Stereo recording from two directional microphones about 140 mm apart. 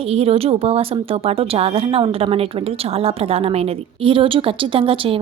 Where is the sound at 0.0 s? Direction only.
45° right (ahead or behind).